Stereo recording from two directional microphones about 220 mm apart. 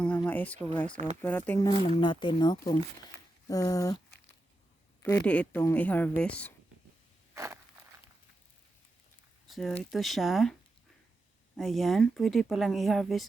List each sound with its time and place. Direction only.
0.3 s speech: 10° left (ahead or behind)
0.9 s speech: 35° right (ahead or behind)
1.2 s speech: 5° left (ahead or behind)
5.0 s speech: 5° left (ahead or behind)
7.3 s walk: 15° right (ahead or behind)
9.5 s speech: centre (ahead or behind)
11.5 s speech: centre (ahead or behind)